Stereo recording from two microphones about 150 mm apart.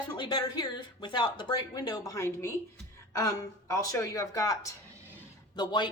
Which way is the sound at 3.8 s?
20° left (ahead or behind).